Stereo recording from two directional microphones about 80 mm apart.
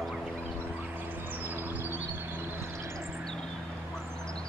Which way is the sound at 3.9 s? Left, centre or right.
Centre.